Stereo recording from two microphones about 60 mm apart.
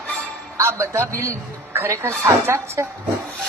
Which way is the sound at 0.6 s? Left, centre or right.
Right.